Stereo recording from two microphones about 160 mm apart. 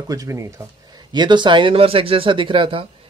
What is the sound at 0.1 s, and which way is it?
Speech, 20° right (ahead or behind).